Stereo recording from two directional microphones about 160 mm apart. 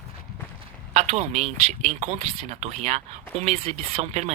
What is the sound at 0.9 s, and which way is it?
Speech, 45° right (ahead or behind).